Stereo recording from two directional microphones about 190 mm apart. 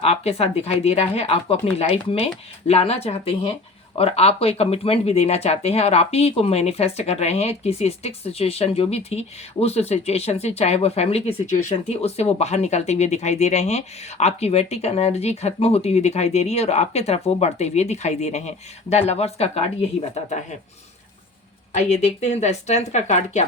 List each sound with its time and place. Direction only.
0.0 s speech: 30° left (ahead or behind)
21.7 s speech: 35° left (ahead or behind)